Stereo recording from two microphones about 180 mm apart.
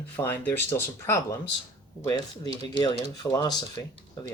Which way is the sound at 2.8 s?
20° left (ahead or behind).